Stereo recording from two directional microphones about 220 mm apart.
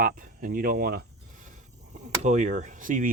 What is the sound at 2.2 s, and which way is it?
Speech, 35° right (ahead or behind).